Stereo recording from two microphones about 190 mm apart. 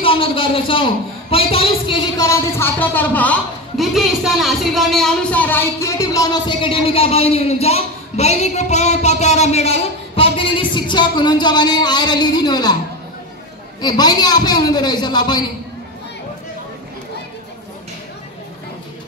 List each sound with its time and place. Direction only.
0.0 s a woman's voice: 30° left (ahead or behind)
13.7 s a woman's voice: 20° left (ahead or behind)